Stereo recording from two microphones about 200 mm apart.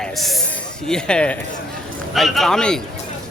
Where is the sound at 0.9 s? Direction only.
5° left (ahead or behind).